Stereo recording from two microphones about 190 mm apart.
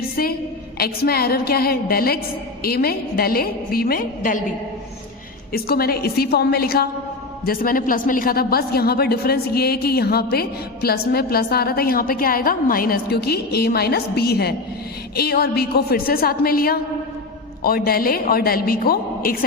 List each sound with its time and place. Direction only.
0.2 s a woman's voice: 50° left (ahead or behind)
5.5 s a woman's voice: 55° left (ahead or behind)